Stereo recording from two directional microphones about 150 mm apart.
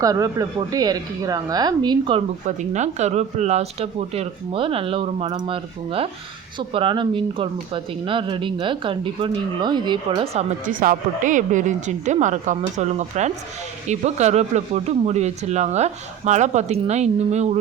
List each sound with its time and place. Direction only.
0.0 s speech: 25° right (ahead or behind)
2.7 s speech: 50° right (ahead or behind); by 10.2 s 30° right (ahead or behind)
10.7 s speech: 65° right (ahead or behind); by 17.6 s 45° right (ahead or behind)